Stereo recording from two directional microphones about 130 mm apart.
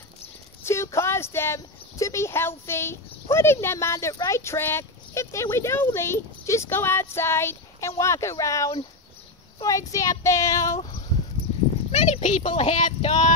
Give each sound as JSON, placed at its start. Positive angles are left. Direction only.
{"t": 0.7, "sound": "speech", "side_deg": 20}
{"t": 10.8, "sound": "a sound", "side_deg": 45}
{"t": 11.9, "sound": "speech", "side_deg": 60}